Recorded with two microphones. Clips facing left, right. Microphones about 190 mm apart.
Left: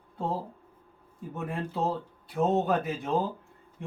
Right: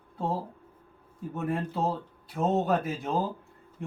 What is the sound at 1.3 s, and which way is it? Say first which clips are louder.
Speech: right 3 dB; centre (ahead or behind).